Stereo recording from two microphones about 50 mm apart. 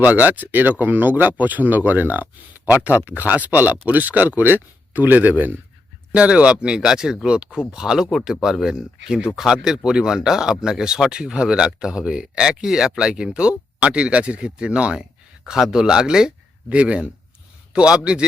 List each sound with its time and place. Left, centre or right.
0.0 s speech: right
6.1 s speech: right
15.4 s a man's voice: centre